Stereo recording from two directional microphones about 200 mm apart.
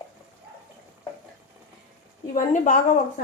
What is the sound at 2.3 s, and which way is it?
Speech, 40° left (ahead or behind).